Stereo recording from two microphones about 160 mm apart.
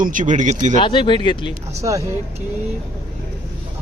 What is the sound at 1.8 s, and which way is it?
Speech, 20° right (ahead or behind).